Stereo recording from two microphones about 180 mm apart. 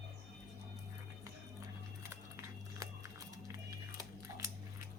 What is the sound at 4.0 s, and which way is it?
Scissors, 15° right (ahead or behind).